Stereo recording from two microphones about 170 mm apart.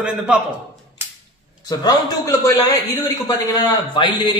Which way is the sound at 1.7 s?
25° left (ahead or behind).